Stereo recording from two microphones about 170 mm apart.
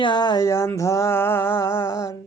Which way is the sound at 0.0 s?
25° left (ahead or behind).